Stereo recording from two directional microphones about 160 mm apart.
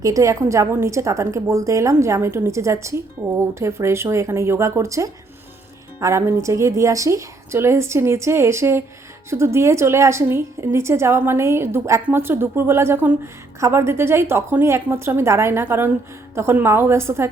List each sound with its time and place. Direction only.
0.0 s a woman's voice: 20° right (ahead or behind)